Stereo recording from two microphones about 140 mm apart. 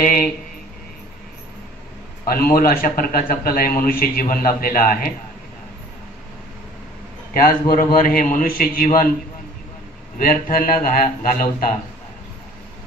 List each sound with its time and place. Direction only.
2.2 s a man's voice: 90° left
7.3 s a man's voice: 90° left
10.1 s a man's voice: 85° left